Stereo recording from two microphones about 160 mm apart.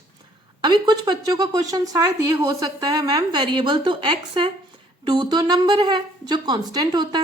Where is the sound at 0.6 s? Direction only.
25° right (ahead or behind).